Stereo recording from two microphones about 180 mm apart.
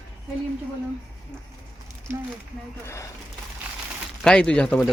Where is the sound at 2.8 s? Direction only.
15° left (ahead or behind).